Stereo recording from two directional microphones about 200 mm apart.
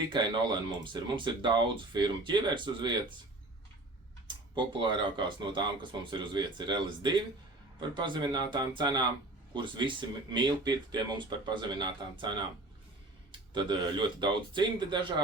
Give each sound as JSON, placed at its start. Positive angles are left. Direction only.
{"t": 0.1, "sound": "speech", "side_deg": -20}
{"t": 4.5, "sound": "speech", "side_deg": -25}